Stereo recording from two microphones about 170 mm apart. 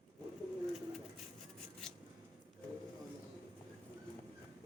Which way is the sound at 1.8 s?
5° left (ahead or behind).